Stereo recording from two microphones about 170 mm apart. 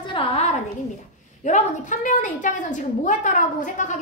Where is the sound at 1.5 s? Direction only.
45° left (ahead or behind).